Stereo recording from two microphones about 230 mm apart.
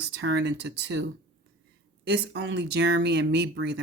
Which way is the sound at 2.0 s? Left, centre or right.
Right.